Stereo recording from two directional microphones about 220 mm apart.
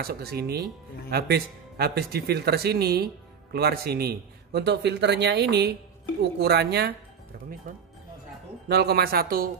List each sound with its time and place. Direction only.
0.0 s a man's voice: 45° right (ahead or behind)
8.6 s a man's voice: 45° right (ahead or behind)